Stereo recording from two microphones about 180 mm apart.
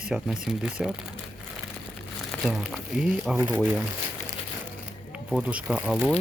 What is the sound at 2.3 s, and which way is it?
Speech, centre (ahead or behind).